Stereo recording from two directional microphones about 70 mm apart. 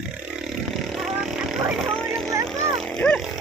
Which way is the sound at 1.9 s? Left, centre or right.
Centre.